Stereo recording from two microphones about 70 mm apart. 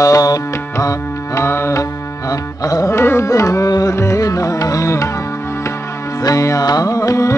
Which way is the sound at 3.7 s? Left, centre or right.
Left.